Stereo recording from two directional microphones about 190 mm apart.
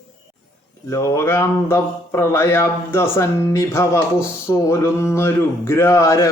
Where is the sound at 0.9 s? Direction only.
15° left (ahead or behind).